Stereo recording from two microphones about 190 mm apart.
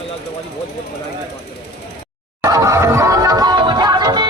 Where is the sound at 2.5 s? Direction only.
20° right (ahead or behind).